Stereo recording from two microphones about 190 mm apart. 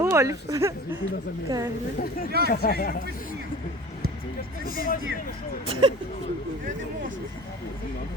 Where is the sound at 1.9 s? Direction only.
50° left (ahead or behind).